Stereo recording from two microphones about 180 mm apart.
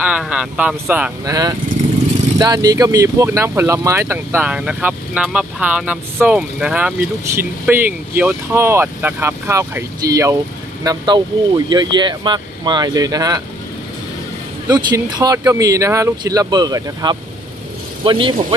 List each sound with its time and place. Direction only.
0.0 s speech: 5° right (ahead or behind)
1.2 s speech: 20° right (ahead or behind)
14.7 s speech: 20° right (ahead or behind)